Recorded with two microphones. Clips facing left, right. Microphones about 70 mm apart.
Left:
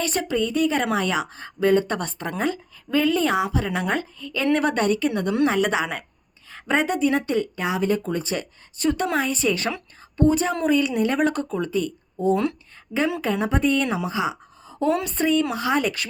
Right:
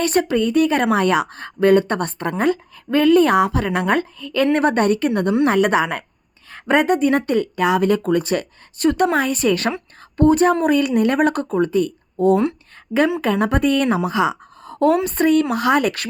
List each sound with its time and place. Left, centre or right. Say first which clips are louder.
0.0 s speech: right 6 dB; right
4.5 s speech: right 2 dB; right
13.4 s a woman's voice: right 3 dB; right